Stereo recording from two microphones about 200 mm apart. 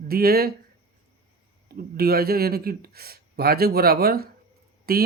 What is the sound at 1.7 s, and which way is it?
Speech, 50° right (ahead or behind).